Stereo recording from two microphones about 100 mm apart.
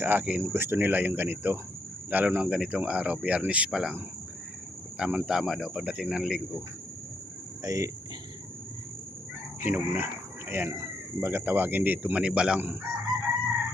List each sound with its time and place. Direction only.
0.0 s speech: 20° right (ahead or behind)
4.9 s speech: 10° right (ahead or behind)
7.6 s speech: 35° right (ahead or behind)
9.6 s speech: 20° right (ahead or behind)